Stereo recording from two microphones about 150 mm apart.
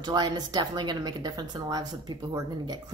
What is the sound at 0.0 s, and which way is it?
A woman's voice, 30° right (ahead or behind).